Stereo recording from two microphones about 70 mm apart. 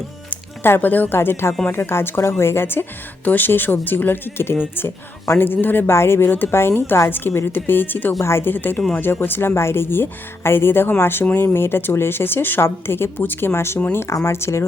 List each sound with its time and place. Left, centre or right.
0.3 s speech: left